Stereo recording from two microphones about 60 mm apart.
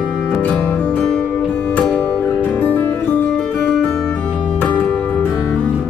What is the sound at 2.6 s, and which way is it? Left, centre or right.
Music, left.